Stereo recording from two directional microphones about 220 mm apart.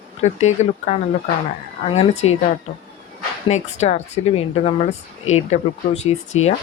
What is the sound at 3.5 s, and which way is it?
Speech, 30° left (ahead or behind).